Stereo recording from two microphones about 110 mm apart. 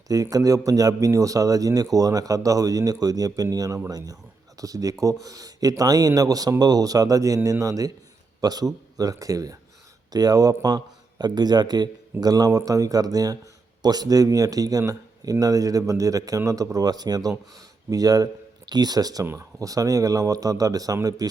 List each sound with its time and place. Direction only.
0.1 s a man's voice: 35° right (ahead or behind)